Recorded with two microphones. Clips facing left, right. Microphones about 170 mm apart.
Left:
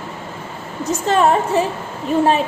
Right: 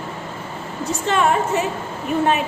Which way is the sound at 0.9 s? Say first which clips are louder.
Left 4 dB; 35° left (ahead or behind).